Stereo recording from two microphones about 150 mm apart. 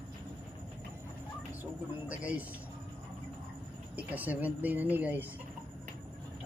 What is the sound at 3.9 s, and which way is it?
Speech, 10° right (ahead or behind).